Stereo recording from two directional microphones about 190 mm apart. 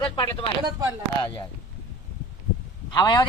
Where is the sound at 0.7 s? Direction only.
20° right (ahead or behind).